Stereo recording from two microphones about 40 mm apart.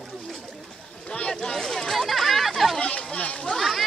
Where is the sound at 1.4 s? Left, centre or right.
Centre.